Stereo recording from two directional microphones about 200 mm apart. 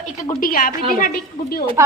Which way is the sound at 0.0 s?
40° left (ahead or behind).